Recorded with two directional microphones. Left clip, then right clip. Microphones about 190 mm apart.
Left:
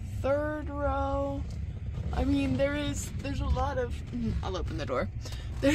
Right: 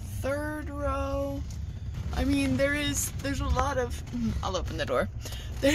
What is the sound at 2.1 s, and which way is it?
Speech, 35° right (ahead or behind).